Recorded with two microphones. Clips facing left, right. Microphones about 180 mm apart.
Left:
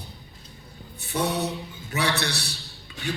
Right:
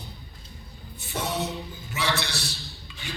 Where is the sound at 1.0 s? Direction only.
65° left (ahead or behind).